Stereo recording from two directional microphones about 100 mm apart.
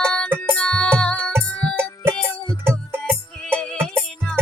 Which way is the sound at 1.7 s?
25° right (ahead or behind).